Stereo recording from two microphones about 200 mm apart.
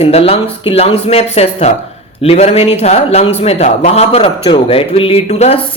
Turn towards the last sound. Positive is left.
turn(degrees=30)  # may be behind; listen again after turning